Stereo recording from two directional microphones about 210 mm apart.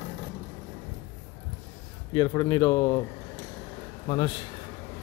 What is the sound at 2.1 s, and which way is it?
Speech, 20° left (ahead or behind).